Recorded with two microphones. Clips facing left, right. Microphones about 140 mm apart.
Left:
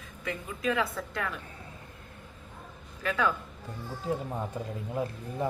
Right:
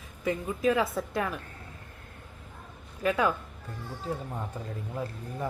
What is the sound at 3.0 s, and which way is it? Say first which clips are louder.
Speech: right 3 dB; 20° right (ahead or behind).